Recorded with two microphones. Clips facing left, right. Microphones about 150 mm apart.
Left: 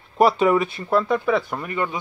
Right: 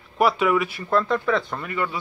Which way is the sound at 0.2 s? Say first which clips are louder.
Left 3 dB; 30° left (ahead or behind).